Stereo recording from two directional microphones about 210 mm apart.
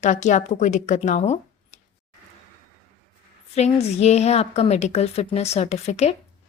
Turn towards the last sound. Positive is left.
turn(degrees=30)  # may be behind; listen again after turning